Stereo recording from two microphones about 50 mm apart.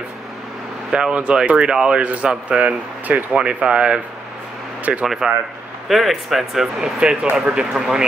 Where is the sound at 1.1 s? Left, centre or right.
Right.